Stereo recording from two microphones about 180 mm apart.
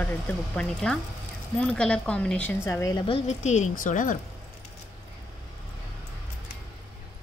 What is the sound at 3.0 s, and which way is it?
Speech, 35° left (ahead or behind).